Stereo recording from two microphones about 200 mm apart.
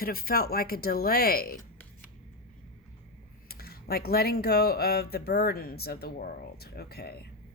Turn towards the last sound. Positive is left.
turn(degrees=50)  # may be behind; listen again after turning